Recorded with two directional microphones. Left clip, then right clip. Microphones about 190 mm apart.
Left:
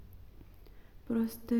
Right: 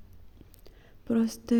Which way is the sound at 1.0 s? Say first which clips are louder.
Right 6 dB; 30° right (ahead or behind).